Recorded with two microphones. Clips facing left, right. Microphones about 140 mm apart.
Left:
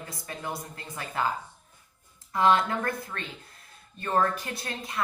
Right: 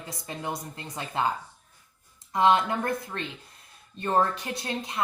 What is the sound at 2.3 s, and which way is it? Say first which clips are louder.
Speech: right 1 dB; 25° right (ahead or behind).